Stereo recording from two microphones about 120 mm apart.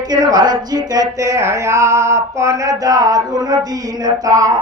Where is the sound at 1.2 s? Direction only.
25° right (ahead or behind).